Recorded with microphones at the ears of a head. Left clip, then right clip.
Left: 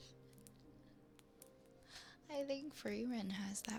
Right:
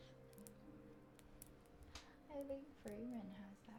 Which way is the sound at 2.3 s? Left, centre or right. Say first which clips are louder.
Left 7 dB; left.